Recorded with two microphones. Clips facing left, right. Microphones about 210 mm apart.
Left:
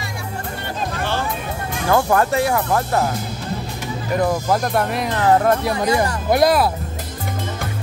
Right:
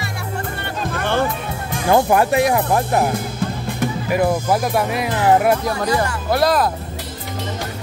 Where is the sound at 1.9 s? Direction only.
15° right (ahead or behind).